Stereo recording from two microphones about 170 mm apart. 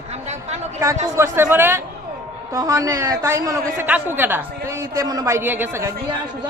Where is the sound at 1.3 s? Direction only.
15° right (ahead or behind).